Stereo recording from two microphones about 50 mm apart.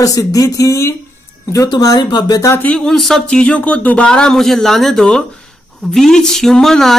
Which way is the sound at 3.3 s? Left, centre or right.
Left.